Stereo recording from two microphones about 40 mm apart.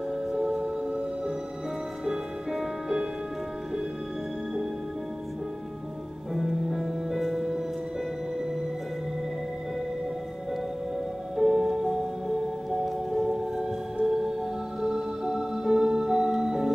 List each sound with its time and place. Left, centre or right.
0.4 s music: right
6.3 s music: centre
11.3 s music: centre